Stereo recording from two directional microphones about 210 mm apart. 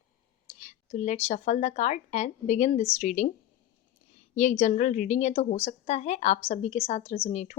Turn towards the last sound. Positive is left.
turn(degrees=35)  # may be behind; listen again after turning